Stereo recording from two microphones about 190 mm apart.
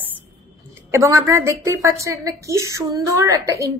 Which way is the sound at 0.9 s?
15° right (ahead or behind).